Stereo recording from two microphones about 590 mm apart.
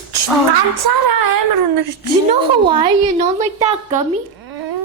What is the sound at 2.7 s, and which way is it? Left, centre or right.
Speech, centre.